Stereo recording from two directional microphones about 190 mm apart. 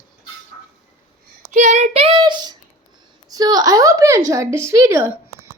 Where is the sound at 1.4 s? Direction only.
40° right (ahead or behind); by 2.6 s 25° right (ahead or behind).